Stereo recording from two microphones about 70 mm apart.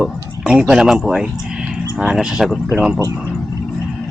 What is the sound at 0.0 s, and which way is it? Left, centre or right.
Speech, centre.